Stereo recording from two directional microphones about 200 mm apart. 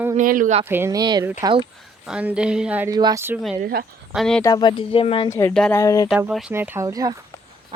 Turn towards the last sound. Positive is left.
turn(degrees=-15)  # may be behind; listen again after turning